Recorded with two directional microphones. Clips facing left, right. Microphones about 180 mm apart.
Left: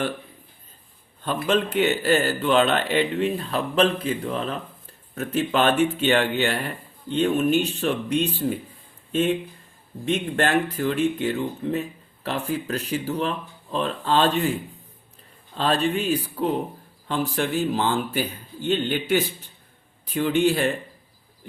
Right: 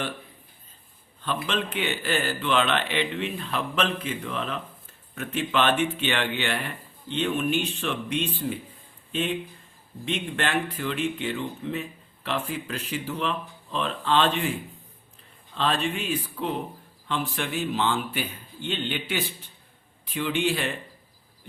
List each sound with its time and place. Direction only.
1.5 s speech: 45° left (ahead or behind)
10.1 s speech: 40° left (ahead or behind)
15.5 s speech: 40° left (ahead or behind)